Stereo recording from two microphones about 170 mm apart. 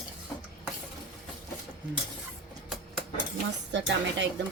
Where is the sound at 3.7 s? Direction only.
90° right.